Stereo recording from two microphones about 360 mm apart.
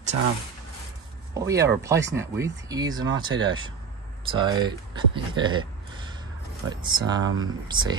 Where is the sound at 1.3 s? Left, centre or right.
Centre.